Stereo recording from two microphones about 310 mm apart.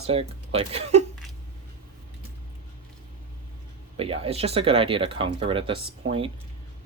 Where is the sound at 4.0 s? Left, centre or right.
Centre.